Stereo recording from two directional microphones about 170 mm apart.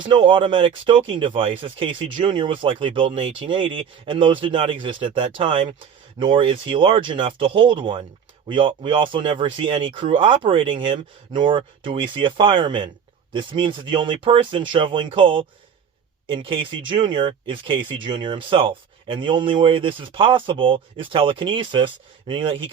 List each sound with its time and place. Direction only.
0.0 s speech: 30° right (ahead or behind)